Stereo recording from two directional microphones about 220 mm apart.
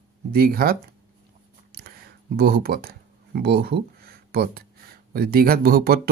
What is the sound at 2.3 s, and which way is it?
Speech, 45° right (ahead or behind).